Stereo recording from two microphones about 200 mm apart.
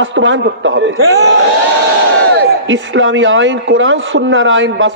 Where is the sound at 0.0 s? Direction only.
65° right (ahead or behind).